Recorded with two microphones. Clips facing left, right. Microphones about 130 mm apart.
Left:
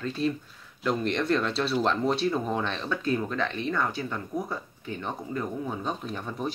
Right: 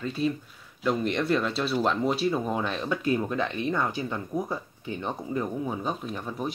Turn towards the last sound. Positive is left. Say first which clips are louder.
# even
turn(degrees=0)  # may be behind; listen again after turning